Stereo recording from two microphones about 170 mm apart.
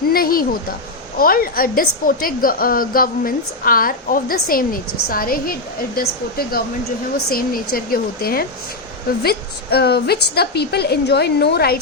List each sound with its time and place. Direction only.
0.1 s a woman's voice: 60° left (ahead or behind)